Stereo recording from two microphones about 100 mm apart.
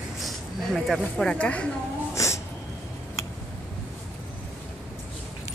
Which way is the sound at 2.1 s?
30° left (ahead or behind).